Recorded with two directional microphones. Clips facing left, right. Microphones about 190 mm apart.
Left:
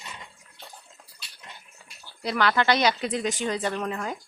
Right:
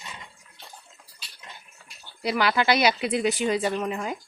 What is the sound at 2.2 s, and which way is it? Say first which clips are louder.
Speech: even; 10° right (ahead or behind).